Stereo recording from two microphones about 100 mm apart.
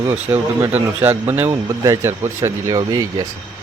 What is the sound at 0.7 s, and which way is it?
Speech, 20° right (ahead or behind).